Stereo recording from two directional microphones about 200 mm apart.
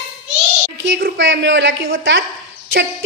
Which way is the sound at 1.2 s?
65° right (ahead or behind).